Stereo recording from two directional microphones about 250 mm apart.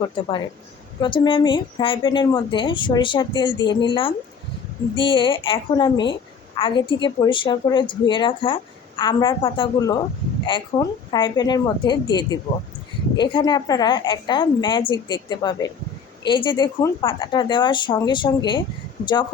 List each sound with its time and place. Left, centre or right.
0.0 s a woman's voice: centre